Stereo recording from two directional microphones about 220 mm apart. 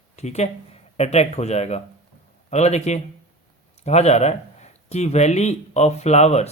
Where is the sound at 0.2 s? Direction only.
30° left (ahead or behind).